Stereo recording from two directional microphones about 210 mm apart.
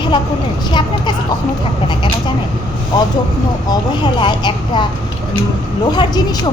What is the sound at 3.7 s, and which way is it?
Speech, 20° left (ahead or behind).